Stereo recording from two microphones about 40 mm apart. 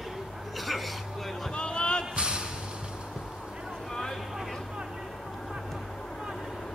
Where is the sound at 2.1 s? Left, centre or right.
Right.